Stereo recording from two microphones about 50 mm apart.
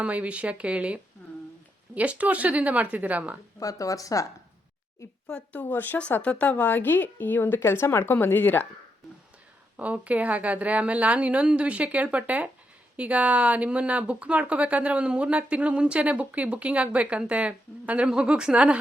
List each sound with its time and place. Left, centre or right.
0.0 s speech: right
2.0 s speech: right
3.6 s speech: left
5.5 s speech: left
5.7 s speech: left
6.2 s a woman's voice: left
9.7 s a woman's voice: right